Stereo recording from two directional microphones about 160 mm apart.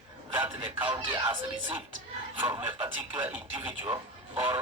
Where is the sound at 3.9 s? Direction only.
30° right (ahead or behind).